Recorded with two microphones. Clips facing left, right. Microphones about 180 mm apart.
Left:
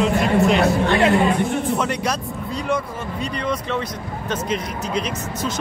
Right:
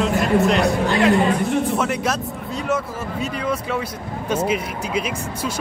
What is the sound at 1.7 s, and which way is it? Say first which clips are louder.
Speech: right 1 dB; 5° right (ahead or behind).